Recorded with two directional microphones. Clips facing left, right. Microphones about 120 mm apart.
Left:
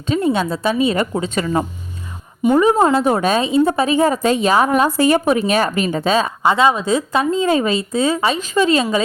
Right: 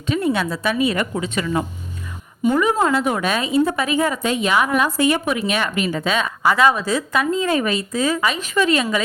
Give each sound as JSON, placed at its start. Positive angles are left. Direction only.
{"t": 0.1, "sound": "a woman's voice", "side_deg": 25}